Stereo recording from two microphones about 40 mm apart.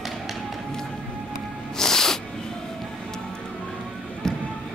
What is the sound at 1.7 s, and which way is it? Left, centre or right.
Music, centre.